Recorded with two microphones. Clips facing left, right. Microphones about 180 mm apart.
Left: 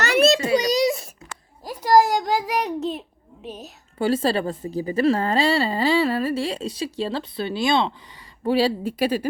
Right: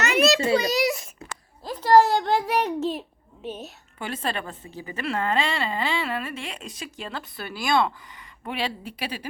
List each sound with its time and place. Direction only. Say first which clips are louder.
0.5 s a sound: left 3 dB; 20° left (ahead or behind); by 3.0 s centre (ahead or behind)
3.4 s a woman's voice: right 2 dB; centre (ahead or behind)
3.9 s speech: left 10 dB; 30° left (ahead or behind)
8.4 s speech: left 10 dB; 35° left (ahead or behind)